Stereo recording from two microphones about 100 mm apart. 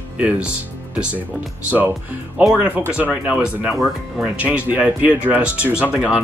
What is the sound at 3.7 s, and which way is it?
Speech, centre (ahead or behind).